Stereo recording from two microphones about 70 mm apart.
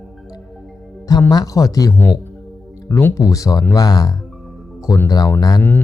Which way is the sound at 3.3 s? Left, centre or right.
Left.